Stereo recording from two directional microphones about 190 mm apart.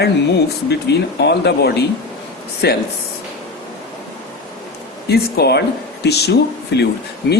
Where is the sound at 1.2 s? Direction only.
60° left (ahead or behind).